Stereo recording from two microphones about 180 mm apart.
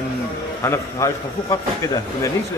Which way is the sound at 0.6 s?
15° left (ahead or behind).